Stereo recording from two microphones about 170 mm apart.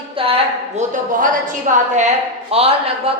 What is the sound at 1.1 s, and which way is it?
A woman's voice, 50° right (ahead or behind).